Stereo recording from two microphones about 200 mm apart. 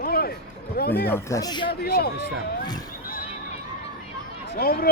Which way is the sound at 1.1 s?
15° left (ahead or behind).